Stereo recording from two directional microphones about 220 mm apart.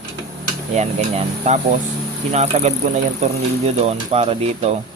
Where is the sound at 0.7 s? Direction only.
30° right (ahead or behind).